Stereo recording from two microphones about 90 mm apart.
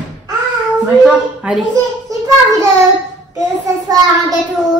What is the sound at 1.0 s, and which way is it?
Speech, 5° right (ahead or behind).